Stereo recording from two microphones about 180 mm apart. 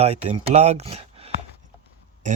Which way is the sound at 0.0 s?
35° right (ahead or behind).